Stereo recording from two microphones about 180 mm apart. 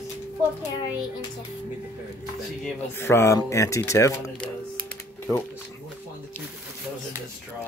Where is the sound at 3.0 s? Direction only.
15° left (ahead or behind).